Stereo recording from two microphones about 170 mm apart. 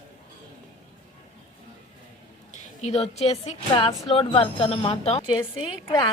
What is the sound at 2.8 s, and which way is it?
A woman's voice, 40° left (ahead or behind).